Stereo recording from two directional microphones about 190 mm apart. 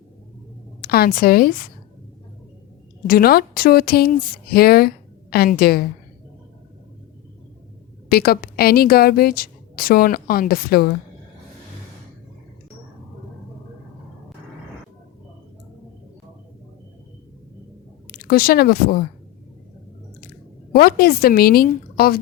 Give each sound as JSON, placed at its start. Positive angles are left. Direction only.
{"t": 0.8, "sound": "a woman's voice", "side_deg": 55}
{"t": 3.1, "sound": "a woman's voice", "side_deg": 50}
{"t": 8.1, "sound": "a woman's voice", "side_deg": 55}
{"t": 18.1, "sound": "speech", "side_deg": 50}
{"t": 20.7, "sound": "a woman's voice", "side_deg": 55}